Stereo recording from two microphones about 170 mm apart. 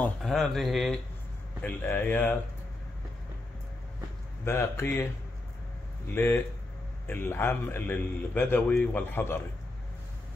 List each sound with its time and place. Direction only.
0.0 s speech: centre (ahead or behind)
1.6 s a man's voice: 10° left (ahead or behind)
4.5 s a man's voice: 15° left (ahead or behind)